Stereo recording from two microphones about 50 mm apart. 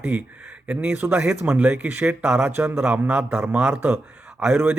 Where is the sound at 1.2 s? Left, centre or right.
Right.